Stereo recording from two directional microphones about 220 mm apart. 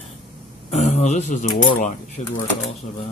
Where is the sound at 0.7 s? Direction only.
30° left (ahead or behind).